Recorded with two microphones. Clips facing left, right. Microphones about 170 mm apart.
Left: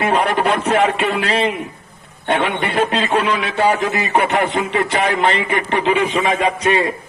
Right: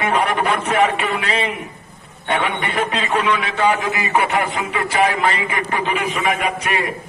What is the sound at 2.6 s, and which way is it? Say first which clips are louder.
Speech: left 4 dB; 35° left (ahead or behind).